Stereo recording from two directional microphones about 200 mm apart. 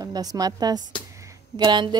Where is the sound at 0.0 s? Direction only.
20° right (ahead or behind).